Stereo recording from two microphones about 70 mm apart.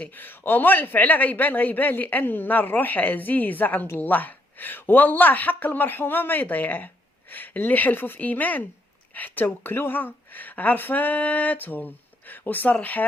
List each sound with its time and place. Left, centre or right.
0.0 s speech: left